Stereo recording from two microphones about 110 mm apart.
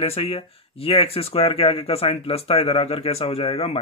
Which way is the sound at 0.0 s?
60° left (ahead or behind).